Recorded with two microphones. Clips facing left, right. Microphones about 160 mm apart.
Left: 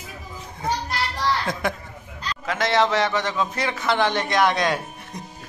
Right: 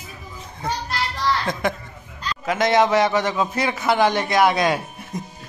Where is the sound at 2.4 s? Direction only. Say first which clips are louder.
Right 3 dB; 15° right (ahead or behind).